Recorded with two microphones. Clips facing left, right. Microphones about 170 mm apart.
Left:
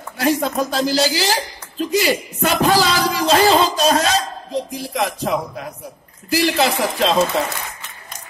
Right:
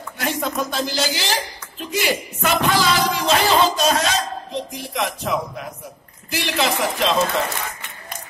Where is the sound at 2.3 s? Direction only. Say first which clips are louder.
Left 3 dB; 35° left (ahead or behind).